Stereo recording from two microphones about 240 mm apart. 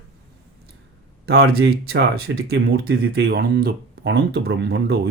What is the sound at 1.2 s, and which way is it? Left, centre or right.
Speech, right.